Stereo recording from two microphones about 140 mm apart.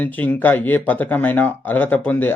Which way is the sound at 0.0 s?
10° left (ahead or behind).